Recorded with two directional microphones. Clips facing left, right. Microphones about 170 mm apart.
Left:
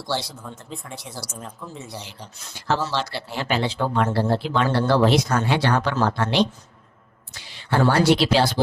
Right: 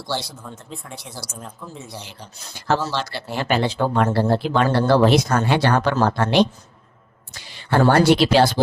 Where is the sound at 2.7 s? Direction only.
50° right (ahead or behind).